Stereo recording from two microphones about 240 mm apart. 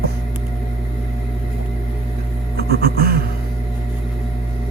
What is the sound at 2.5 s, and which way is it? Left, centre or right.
Music, right.